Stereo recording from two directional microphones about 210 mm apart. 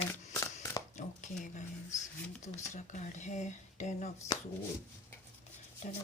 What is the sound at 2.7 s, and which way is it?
Speech, 35° left (ahead or behind).